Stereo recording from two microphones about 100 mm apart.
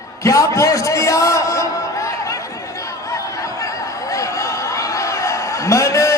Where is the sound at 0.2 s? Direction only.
30° left (ahead or behind).